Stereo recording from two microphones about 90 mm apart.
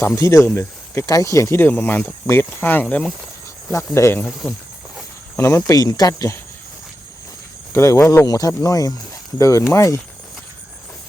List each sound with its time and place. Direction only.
0.0 s speech: 30° left (ahead or behind)
1.7 s speech: 15° left (ahead or behind)
2.2 s speech: 30° left (ahead or behind)
3.9 s speech: 30° left (ahead or behind)
4.4 s speech: 10° left (ahead or behind)
5.4 s speech: 30° left (ahead or behind)
7.7 s speech: 30° left (ahead or behind)